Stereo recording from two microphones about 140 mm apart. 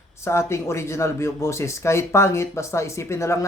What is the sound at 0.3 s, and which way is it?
Speech, 20° left (ahead or behind).